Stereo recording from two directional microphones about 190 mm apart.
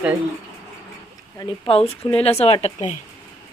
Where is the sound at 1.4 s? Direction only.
30° left (ahead or behind).